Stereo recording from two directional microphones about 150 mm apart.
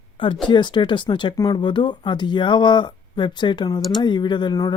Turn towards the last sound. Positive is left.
turn(degrees=30)  # may be behind; listen again after turning